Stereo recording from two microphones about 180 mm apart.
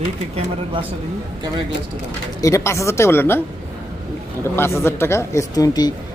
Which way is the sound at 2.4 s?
15° left (ahead or behind).